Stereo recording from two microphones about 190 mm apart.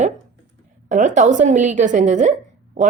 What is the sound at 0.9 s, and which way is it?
A woman's voice, 40° right (ahead or behind).